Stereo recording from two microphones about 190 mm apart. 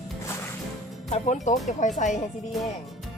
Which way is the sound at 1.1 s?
40° left (ahead or behind).